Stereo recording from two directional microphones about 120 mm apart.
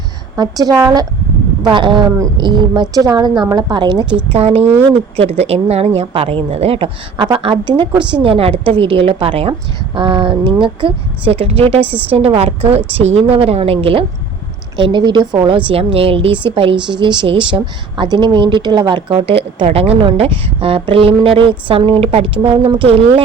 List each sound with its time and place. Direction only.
0.3 s a woman's voice: 35° right (ahead or behind)
5.1 s a woman's voice: 55° right (ahead or behind)
9.5 s a woman's voice: 40° right (ahead or behind)
15.7 s speech: 55° right (ahead or behind)